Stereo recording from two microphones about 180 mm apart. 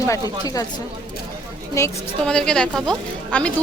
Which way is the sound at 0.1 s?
20° left (ahead or behind).